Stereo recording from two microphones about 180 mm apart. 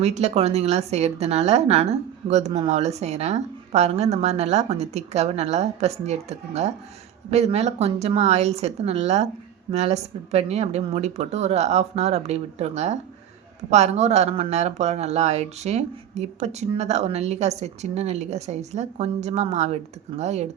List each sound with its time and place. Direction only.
0.0 s speech: 35° right (ahead or behind)